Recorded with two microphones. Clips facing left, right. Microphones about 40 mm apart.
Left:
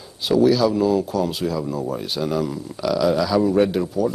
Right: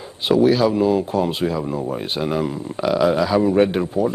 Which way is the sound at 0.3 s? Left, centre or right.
Right.